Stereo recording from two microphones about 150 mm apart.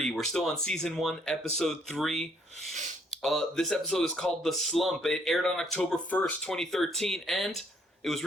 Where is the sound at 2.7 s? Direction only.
50° right (ahead or behind).